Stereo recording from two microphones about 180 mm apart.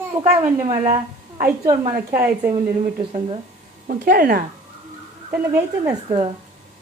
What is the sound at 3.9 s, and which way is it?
Speech, 55° right (ahead or behind).